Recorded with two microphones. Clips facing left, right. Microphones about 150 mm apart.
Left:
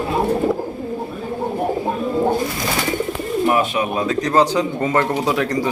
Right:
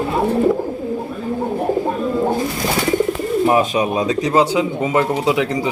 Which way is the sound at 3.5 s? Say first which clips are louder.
Right 2 dB; 20° right (ahead or behind).